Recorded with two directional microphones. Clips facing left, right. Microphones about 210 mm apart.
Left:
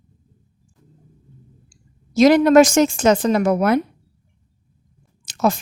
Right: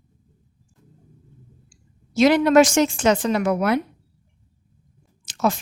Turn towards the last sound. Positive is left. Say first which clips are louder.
# left 3 dB
turn(degrees=45)  # may be behind; listen again after turning